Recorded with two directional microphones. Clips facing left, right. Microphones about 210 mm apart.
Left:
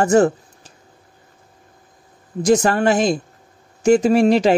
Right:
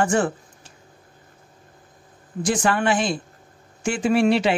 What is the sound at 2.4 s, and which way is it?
Speech, 40° left (ahead or behind).